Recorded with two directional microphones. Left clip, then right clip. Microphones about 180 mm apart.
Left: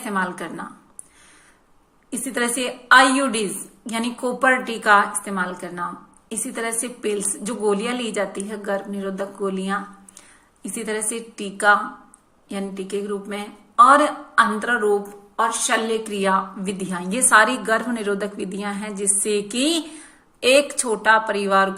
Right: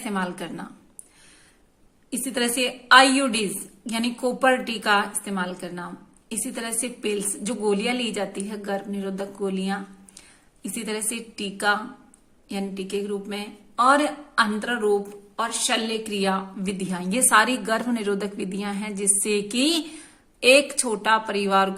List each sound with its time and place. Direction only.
0.0 s a woman's voice: 35° right (ahead or behind)
2.0 s a woman's voice: 35° right (ahead or behind)